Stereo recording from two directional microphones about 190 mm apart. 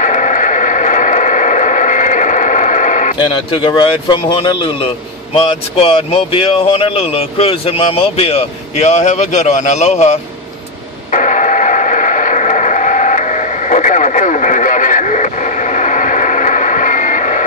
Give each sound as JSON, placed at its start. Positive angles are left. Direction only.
{"t": 0.0, "sound": "a sound", "side_deg": 40}
{"t": 3.7, "sound": "a man's voice", "side_deg": 25}
{"t": 11.1, "sound": "radio", "side_deg": 40}